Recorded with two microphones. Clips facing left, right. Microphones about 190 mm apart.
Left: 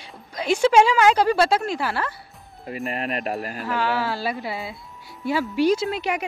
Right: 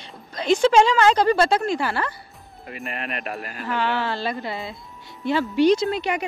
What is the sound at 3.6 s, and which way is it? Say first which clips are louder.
Speech: right 1 dB; 5° left (ahead or behind).